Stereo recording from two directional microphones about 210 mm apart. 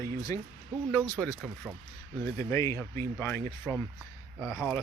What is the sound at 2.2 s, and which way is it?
Speech, 15° left (ahead or behind).